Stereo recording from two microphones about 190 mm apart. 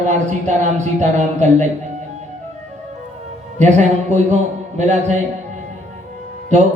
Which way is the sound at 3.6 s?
35° right (ahead or behind).